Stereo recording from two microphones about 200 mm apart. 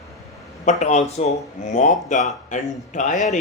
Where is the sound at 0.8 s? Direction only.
35° left (ahead or behind).